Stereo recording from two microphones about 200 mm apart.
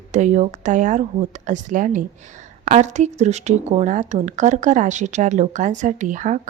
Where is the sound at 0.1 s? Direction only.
35° right (ahead or behind).